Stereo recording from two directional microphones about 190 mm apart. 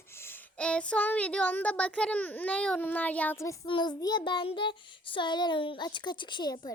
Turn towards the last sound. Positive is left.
turn(degrees=20)  # may be behind; listen again after turning